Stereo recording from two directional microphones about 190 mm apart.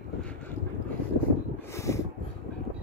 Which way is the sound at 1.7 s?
15° left (ahead or behind).